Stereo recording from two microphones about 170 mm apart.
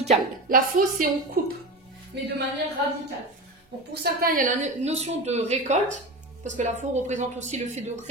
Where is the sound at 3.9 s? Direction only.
65° right (ahead or behind).